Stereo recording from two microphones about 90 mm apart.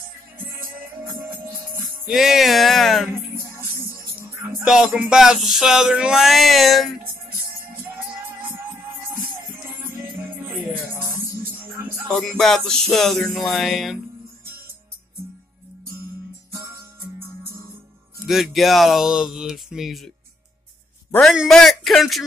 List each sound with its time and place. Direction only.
2.0 s music: 5° right (ahead or behind)
3.1 s music: 30° right (ahead or behind)
4.6 s music: 5° right (ahead or behind)
7.5 s music: 25° right (ahead or behind)
11.8 s music: 20° right (ahead or behind)
12.1 s music: 5° left (ahead or behind)
16.5 s music: 35° right (ahead or behind)
18.2 s music: centre (ahead or behind)
21.2 s music: centre (ahead or behind)